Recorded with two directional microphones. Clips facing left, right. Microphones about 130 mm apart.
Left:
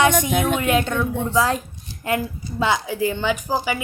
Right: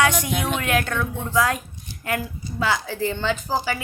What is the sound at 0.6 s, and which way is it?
A woman's voice, 20° left (ahead or behind).